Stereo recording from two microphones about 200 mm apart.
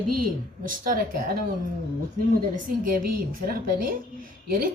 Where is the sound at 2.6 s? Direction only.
45° right (ahead or behind).